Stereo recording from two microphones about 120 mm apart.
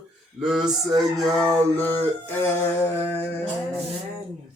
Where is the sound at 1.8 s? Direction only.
20° left (ahead or behind).